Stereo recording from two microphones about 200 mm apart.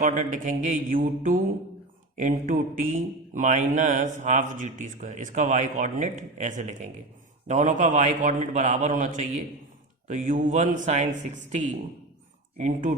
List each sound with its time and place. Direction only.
0.0 s speech: 40° right (ahead or behind)